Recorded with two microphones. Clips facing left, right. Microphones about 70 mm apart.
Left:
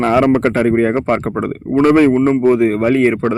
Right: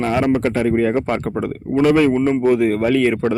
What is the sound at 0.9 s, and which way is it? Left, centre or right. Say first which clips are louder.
Speech: left 4 dB; left.